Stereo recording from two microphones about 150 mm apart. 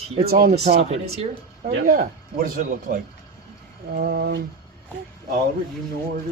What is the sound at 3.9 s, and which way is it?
Speech, 90° right.